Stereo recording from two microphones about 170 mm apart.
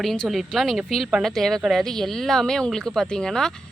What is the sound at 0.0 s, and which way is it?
Speech, centre (ahead or behind).